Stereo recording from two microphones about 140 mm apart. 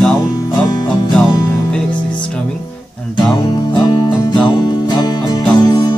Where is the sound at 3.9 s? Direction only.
30° left (ahead or behind).